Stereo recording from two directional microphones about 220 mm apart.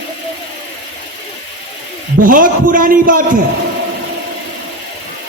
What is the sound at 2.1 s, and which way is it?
A man's voice, 40° right (ahead or behind).